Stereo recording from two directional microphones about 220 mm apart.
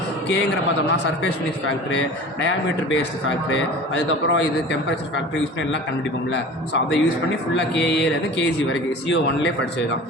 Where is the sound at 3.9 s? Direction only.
55° left (ahead or behind).